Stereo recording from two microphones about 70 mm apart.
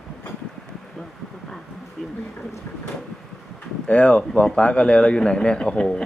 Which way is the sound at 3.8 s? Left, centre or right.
Centre.